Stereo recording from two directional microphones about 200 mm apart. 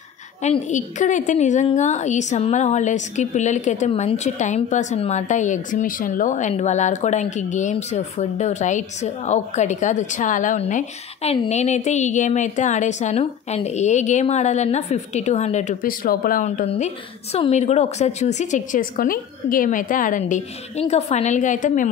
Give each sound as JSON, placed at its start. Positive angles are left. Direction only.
{"t": 0.4, "sound": "a woman's voice", "side_deg": 35}